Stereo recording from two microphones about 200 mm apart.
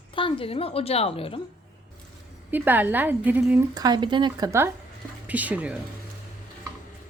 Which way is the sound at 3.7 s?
20° right (ahead or behind).